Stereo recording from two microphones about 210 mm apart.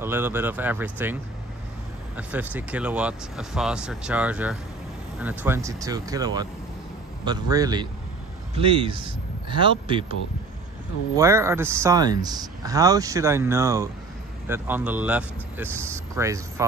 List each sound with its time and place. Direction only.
0.0 s speech: 10° right (ahead or behind)
2.1 s speech: 10° right (ahead or behind); by 10.1 s 25° right (ahead or behind)
11.1 s speech: 15° right (ahead or behind)